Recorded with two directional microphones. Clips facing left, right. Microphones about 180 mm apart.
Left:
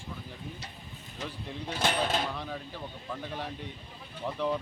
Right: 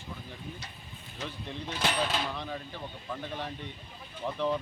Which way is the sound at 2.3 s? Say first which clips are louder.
Even; 5° left (ahead or behind).